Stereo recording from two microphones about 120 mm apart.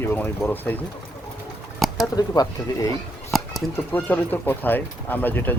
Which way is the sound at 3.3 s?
Centre (ahead or behind).